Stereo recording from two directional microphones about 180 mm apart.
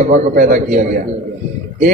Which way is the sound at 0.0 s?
40° right (ahead or behind).